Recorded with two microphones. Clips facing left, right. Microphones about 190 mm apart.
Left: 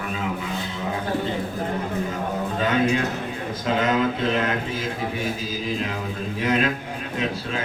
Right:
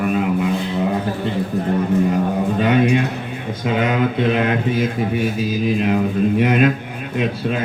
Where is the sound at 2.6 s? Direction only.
65° right (ahead or behind).